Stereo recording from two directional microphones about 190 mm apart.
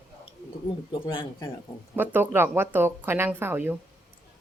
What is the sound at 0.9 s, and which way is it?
Speech, 25° left (ahead or behind).